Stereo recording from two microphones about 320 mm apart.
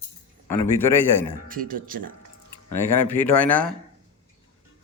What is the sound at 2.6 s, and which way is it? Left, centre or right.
A man's voice, centre.